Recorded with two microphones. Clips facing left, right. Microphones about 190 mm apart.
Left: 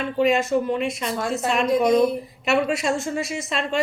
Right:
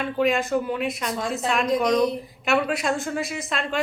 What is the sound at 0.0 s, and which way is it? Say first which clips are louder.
Speech: left 2 dB; centre (ahead or behind).